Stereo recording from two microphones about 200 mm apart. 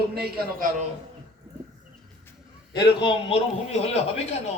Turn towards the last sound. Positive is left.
turn(degrees=30)  # may be behind; listen again after turning